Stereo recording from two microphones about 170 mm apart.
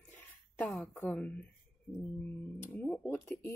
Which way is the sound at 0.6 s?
5° left (ahead or behind).